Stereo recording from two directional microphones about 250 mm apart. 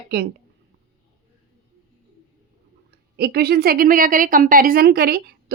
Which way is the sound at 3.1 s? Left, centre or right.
Right.